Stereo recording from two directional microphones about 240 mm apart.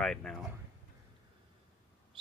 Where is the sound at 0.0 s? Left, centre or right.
Centre.